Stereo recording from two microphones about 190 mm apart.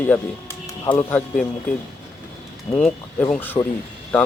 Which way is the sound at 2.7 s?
5° left (ahead or behind).